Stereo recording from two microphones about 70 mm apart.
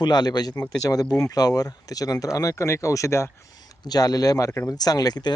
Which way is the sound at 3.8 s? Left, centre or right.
Left.